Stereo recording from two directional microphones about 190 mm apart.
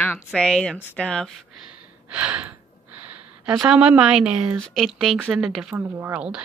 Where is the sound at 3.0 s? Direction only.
5° right (ahead or behind).